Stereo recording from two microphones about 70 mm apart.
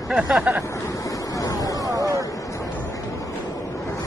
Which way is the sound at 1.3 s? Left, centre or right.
Left.